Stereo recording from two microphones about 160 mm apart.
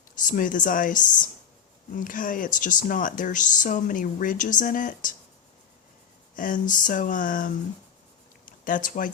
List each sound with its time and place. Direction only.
0.2 s speech: 55° left (ahead or behind)
6.3 s speech: 55° left (ahead or behind)